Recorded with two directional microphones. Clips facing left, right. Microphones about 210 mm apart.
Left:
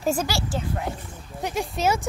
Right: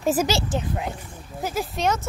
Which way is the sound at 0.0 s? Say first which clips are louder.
Right 3 dB; 5° right (ahead or behind).